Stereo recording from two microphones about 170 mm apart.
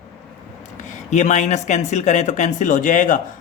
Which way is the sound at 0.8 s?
45° left (ahead or behind).